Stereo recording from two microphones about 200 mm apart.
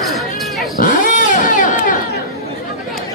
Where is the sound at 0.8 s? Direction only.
40° left (ahead or behind).